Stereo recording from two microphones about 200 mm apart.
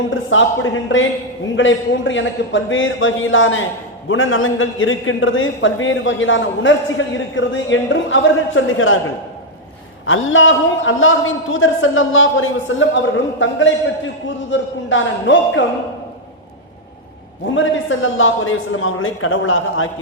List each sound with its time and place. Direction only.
0.1 s a man's voice: 75° left (ahead or behind)
10.1 s a man's voice: 75° left (ahead or behind)
17.5 s a man's voice: 75° left (ahead or behind)